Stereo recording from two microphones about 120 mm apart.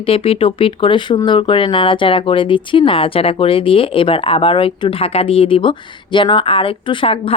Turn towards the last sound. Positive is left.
turn(degrees=50)  # may be behind; listen again after turning